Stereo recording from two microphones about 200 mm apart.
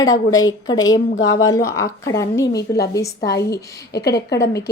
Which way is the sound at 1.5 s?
15° left (ahead or behind).